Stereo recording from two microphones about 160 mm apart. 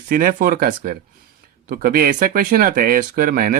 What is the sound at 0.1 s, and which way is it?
Speech, 65° right (ahead or behind).